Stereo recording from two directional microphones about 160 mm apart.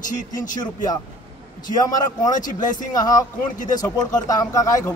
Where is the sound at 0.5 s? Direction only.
25° left (ahead or behind).